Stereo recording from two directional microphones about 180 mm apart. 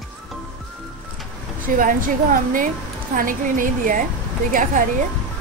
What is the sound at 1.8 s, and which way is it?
A woman's voice, 50° right (ahead or behind).